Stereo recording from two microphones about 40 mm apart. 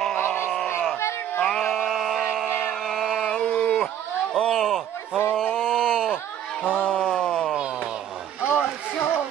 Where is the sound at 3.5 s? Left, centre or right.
Left.